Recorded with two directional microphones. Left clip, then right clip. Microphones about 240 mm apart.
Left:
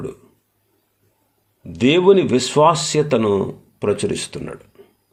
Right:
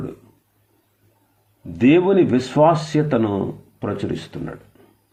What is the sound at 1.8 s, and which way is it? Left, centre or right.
Speech, left.